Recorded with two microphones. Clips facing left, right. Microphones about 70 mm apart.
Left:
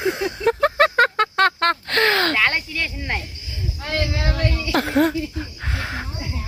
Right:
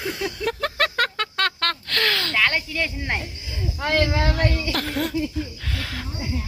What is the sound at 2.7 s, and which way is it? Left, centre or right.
Speech, centre.